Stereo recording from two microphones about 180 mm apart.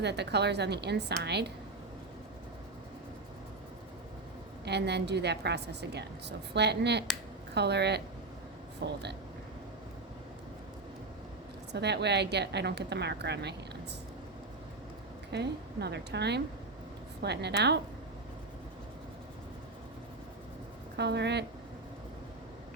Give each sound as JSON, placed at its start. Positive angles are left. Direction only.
{"t": 0.0, "sound": "a woman's voice", "side_deg": -70}
{"t": 4.6, "sound": "a woman's voice", "side_deg": -70}
{"t": 11.7, "sound": "a woman's voice", "side_deg": -70}
{"t": 15.3, "sound": "a woman's voice", "side_deg": -70}
{"t": 20.9, "sound": "a woman's voice", "side_deg": -70}